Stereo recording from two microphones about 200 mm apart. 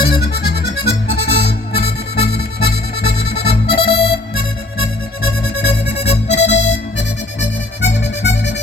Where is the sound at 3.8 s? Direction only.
55° left (ahead or behind).